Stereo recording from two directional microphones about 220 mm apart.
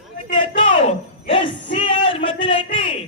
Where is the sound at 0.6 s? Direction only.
30° left (ahead or behind).